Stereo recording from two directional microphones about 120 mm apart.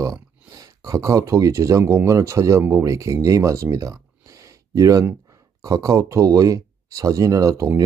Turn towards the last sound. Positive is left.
turn(degrees=-25)  # may be behind; listen again after turning